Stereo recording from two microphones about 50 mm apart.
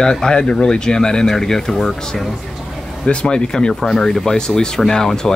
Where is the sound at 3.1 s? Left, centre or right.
Centre.